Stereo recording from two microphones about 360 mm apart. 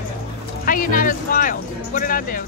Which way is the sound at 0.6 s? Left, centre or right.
Left.